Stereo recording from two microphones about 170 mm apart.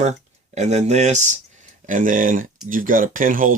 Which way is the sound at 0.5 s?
40° right (ahead or behind).